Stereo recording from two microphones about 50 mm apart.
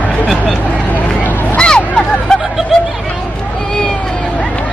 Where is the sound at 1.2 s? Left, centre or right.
Left.